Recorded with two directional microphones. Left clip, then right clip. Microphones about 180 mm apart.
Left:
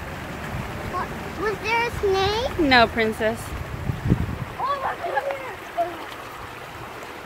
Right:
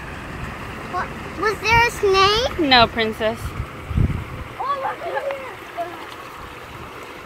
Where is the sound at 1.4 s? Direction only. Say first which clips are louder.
Right 7 dB; 55° right (ahead or behind); by 2.5 s 90° right.